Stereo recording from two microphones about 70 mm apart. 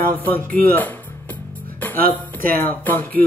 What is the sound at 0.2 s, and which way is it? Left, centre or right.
Speech, left.